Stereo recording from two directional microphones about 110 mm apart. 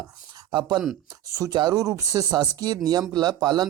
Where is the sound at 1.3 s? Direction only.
30° right (ahead or behind).